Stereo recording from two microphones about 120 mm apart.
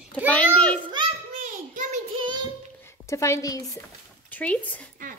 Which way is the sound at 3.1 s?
25° left (ahead or behind).